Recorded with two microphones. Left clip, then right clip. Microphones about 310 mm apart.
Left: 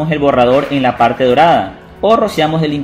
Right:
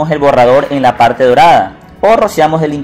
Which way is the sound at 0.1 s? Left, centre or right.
Right.